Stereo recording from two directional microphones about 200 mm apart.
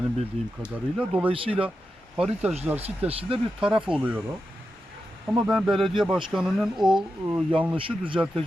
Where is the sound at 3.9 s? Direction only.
5° right (ahead or behind).